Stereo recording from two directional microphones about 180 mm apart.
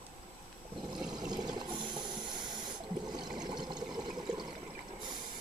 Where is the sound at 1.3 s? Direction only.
25° right (ahead or behind).